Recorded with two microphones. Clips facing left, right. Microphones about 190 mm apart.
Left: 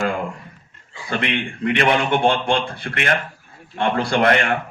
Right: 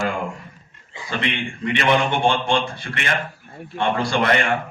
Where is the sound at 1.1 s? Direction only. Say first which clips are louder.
Left 2 dB; 55° left (ahead or behind).